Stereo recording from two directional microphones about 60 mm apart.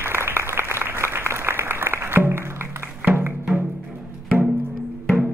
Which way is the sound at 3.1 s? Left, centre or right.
Right.